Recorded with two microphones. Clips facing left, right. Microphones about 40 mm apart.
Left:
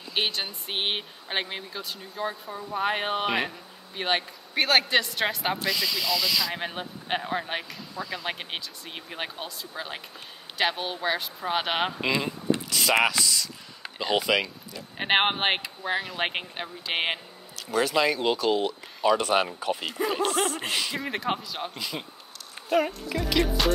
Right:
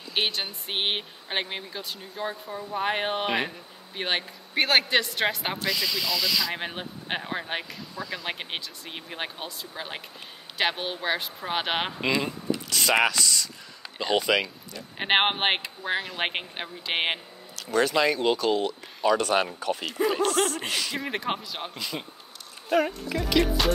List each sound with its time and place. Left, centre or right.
0.1 s speech: centre
17.6 s speech: centre
20.2 s snicker: centre
20.9 s speech: centre
21.7 s speech: centre